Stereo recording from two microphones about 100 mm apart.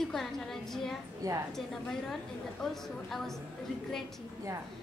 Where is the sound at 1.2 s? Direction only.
35° right (ahead or behind).